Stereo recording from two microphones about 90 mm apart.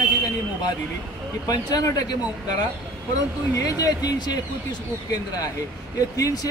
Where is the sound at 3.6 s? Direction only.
40° left (ahead or behind).